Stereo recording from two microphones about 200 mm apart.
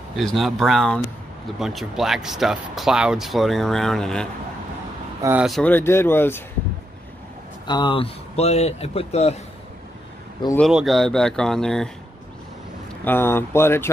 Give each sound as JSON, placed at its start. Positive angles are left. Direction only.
{"t": 0.1, "sound": "speech", "side_deg": 0}
{"t": 5.6, "sound": "speech", "side_deg": 10}
{"t": 7.6, "sound": "speech", "side_deg": 20}
{"t": 10.7, "sound": "speech", "side_deg": 0}
{"t": 13.0, "sound": "speech", "side_deg": 10}